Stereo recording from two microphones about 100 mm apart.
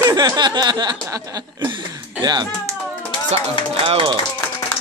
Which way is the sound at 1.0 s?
35° right (ahead or behind).